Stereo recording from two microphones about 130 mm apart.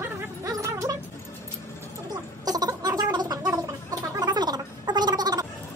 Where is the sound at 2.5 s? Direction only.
30° right (ahead or behind).